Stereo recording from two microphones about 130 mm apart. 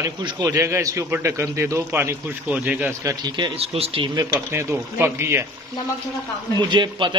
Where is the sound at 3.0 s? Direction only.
35° right (ahead or behind).